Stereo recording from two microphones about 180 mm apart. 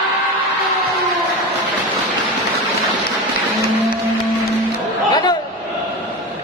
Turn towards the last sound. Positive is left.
turn(degrees=25)  # may be behind; listen again after turning